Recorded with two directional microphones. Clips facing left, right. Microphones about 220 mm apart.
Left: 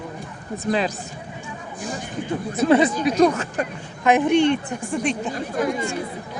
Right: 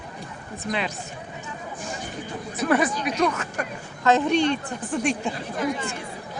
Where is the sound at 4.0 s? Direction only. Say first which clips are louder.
Left 3 dB; 15° left (ahead or behind).